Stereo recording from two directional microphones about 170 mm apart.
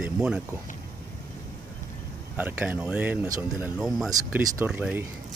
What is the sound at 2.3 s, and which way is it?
Speech, 10° right (ahead or behind).